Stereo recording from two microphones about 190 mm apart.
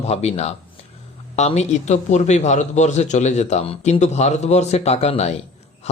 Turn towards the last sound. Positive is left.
turn(degrees=35)  # may be behind; listen again after turning